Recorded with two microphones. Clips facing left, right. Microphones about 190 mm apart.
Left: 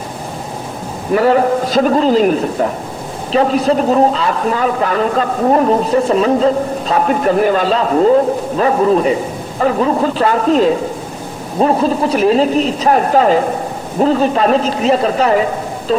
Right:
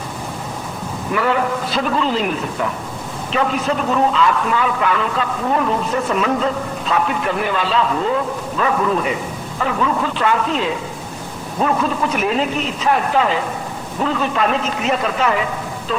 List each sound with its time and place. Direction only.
1.1 s a man's voice: 40° left (ahead or behind)